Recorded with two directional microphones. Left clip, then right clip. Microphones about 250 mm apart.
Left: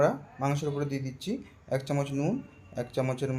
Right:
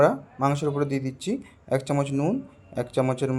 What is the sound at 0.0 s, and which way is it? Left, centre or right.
Speech, right.